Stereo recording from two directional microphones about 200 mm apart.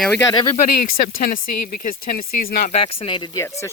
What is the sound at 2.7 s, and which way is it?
Speech, 30° left (ahead or behind).